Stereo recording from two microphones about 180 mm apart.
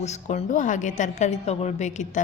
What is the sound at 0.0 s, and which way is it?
A woman's voice, 40° left (ahead or behind).